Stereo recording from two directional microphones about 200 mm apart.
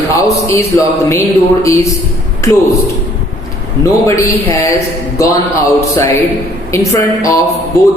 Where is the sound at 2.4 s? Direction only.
15° left (ahead or behind).